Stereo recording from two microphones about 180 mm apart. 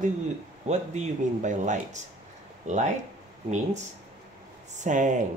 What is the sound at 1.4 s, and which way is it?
Speech, 40° right (ahead or behind).